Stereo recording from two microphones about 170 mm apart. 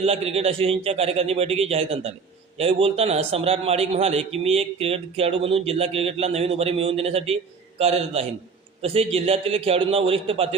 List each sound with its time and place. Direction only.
0.0 s a man's voice: 35° right (ahead or behind)